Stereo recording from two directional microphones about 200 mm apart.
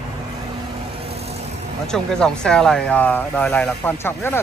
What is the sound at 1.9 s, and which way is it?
Speech, 5° left (ahead or behind).